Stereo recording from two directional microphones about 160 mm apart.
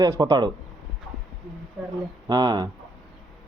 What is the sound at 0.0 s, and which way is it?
Speech, 25° right (ahead or behind).